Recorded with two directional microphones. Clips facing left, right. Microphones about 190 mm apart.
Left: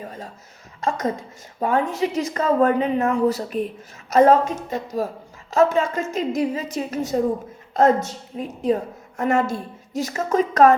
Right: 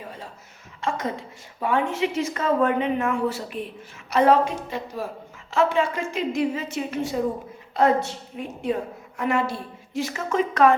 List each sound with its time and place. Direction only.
0.0 s a woman's voice: 45° left (ahead or behind)